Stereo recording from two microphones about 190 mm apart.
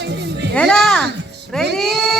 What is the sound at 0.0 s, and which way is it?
Music, 65° right (ahead or behind).